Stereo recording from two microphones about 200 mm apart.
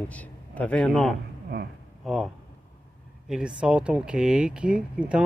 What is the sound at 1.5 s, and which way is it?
Speech, 55° right (ahead or behind).